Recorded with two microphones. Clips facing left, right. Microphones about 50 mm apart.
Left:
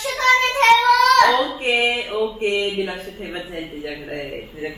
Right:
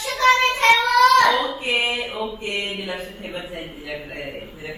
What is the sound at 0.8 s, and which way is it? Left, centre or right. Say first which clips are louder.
A child's voice: left 1 dB; left.